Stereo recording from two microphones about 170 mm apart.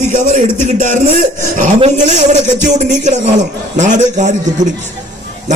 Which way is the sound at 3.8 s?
45° right (ahead or behind).